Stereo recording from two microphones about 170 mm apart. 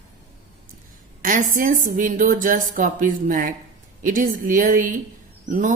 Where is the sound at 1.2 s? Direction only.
50° right (ahead or behind).